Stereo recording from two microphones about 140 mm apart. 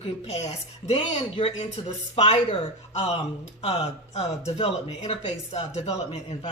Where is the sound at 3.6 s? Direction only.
50° left (ahead or behind).